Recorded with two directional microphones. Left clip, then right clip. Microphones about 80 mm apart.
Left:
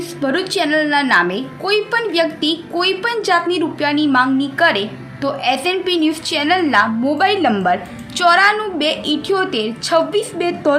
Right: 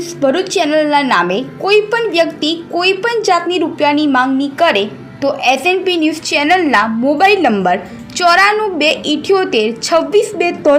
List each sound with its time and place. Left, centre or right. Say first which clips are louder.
0.2 s a woman's voice: right 5 dB; centre